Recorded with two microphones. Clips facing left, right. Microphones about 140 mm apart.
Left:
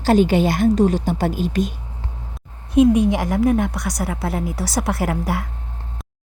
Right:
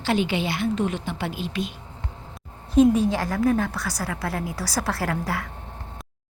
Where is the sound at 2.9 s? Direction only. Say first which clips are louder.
Left 5 dB; 20° left (ahead or behind).